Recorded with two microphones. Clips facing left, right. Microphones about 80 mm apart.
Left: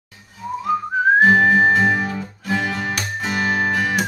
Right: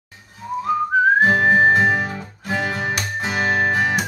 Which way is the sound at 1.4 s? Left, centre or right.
Right.